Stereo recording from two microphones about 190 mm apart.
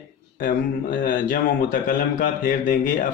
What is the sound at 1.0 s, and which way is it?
A man's voice, 45° left (ahead or behind).